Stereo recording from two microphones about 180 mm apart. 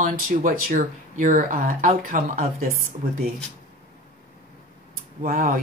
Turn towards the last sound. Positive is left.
turn(degrees=-50)  # may be behind; listen again after turning